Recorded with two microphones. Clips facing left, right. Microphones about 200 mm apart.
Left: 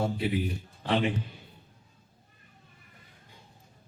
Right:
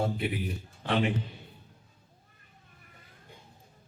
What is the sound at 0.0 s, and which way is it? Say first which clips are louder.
Speech: left 1 dB; 55° right (ahead or behind).